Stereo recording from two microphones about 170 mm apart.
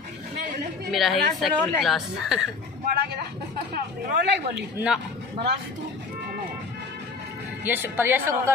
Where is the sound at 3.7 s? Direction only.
55° right (ahead or behind).